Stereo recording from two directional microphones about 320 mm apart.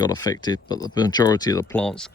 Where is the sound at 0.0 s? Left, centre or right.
Centre.